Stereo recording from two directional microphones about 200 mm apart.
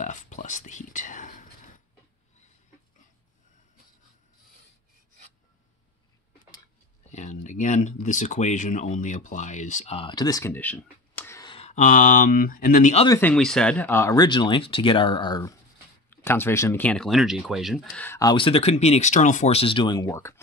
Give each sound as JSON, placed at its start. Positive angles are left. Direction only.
{"t": 0.0, "sound": "whispering", "side_deg": 40}
{"t": 7.1, "sound": "speech", "side_deg": 35}
{"t": 11.5, "sound": "speech", "side_deg": 35}
{"t": 13.1, "sound": "speech", "side_deg": 5}
{"t": 18.0, "sound": "speech", "side_deg": 10}
{"t": 18.3, "sound": "speech", "side_deg": 25}